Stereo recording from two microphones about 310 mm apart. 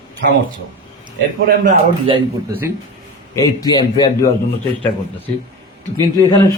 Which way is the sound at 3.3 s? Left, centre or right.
Centre.